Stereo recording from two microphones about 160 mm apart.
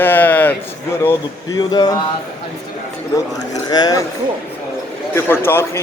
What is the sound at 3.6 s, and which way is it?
Speech, 25° left (ahead or behind).